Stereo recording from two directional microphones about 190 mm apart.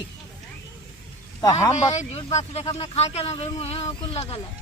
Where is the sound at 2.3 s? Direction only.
30° left (ahead or behind).